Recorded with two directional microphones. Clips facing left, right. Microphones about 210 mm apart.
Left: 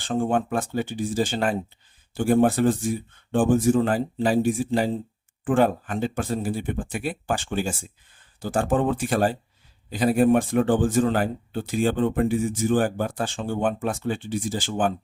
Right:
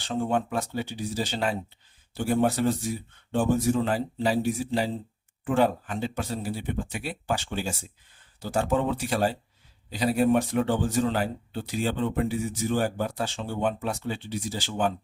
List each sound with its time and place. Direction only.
0.0 s speech: 50° left (ahead or behind)